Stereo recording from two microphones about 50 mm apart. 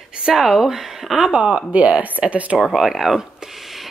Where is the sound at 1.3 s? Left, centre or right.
Right.